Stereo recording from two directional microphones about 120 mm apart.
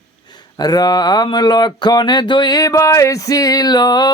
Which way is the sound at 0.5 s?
35° left (ahead or behind).